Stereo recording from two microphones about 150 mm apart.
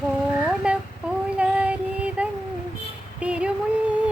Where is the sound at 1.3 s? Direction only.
10° right (ahead or behind).